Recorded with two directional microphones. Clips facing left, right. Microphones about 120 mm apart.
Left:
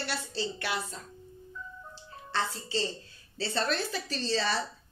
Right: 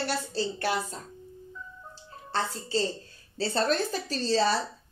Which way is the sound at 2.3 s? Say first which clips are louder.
Right 3 dB; 40° right (ahead or behind).